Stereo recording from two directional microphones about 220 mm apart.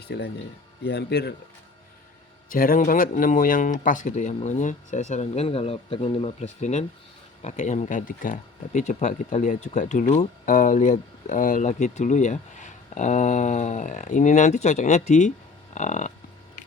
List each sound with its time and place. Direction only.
0.0 s speech: 50° left (ahead or behind)
2.5 s speech: 40° left (ahead or behind)